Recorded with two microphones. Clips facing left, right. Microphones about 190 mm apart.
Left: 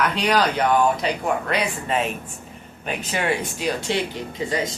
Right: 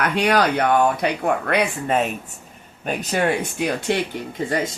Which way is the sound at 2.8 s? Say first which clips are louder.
Right 4 dB; 40° right (ahead or behind).